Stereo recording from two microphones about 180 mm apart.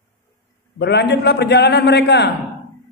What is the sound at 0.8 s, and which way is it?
A man's voice, 70° left (ahead or behind).